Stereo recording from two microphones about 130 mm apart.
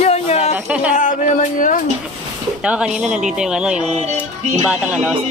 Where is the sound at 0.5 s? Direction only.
10° right (ahead or behind).